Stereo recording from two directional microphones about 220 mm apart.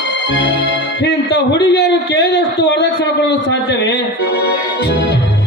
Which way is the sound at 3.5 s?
50° left (ahead or behind).